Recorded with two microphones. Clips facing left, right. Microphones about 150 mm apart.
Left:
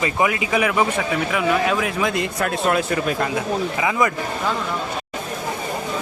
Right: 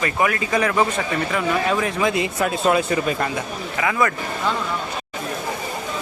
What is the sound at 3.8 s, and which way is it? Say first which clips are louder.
Speech: right 2 dB; 15° left (ahead or behind).